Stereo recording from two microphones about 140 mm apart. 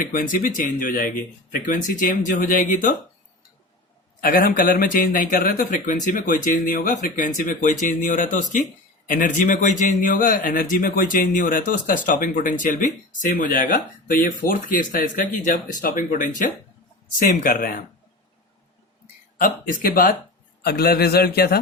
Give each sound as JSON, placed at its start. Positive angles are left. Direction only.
{"t": 0.0, "sound": "speech", "side_deg": 75}
{"t": 4.2, "sound": "speech", "side_deg": 90}
{"t": 19.8, "sound": "a man's voice", "side_deg": 90}